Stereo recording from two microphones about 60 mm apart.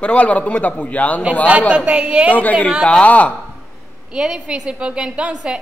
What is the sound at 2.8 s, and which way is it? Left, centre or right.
Speech, left.